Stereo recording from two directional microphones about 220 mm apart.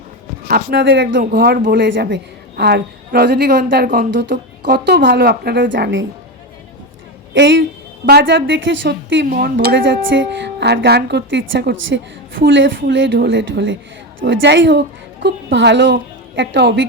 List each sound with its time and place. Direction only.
0.4 s a woman's voice: 45° right (ahead or behind)
7.3 s a woman's voice: 55° right (ahead or behind)
9.2 s a woman's voice: 45° right (ahead or behind)